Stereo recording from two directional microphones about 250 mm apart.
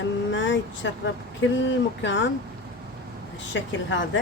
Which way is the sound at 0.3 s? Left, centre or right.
Left.